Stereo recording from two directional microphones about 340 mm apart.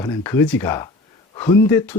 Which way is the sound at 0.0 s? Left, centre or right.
Centre.